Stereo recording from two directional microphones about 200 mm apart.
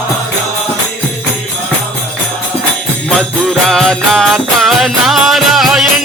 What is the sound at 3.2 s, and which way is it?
Music, 5° left (ahead or behind).